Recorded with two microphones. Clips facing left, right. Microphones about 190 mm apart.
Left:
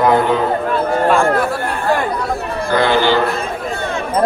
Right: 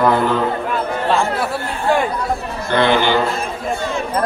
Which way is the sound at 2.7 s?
20° right (ahead or behind).